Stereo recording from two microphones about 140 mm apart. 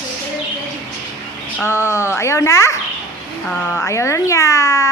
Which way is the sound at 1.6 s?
20° left (ahead or behind).